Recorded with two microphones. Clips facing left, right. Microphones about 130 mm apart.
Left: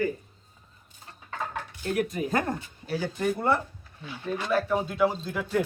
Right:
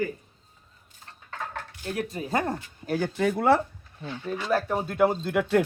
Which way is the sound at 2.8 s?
50° right (ahead or behind).